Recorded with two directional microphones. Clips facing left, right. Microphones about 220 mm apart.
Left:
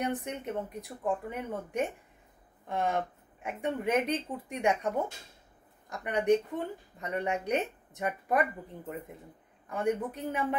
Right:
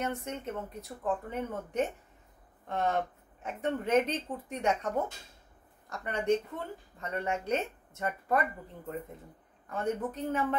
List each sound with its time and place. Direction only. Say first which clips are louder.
0.0 s a woman's voice: left 2 dB; 15° left (ahead or behind)